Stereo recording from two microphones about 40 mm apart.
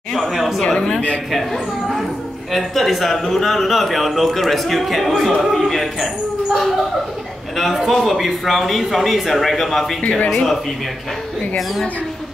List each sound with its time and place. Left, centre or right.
0.1 s a sound: centre
0.7 s speech: left
1.3 s a man's voice: centre
7.5 s a man's voice: centre
10.0 s speech: left